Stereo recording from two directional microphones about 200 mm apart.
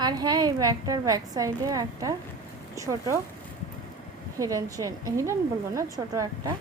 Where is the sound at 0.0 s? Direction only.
20° right (ahead or behind).